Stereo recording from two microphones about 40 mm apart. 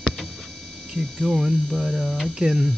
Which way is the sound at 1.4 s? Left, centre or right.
Right.